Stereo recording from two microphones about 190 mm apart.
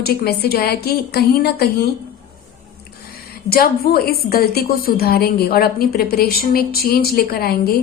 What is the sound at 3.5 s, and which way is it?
A woman's voice, 50° left (ahead or behind).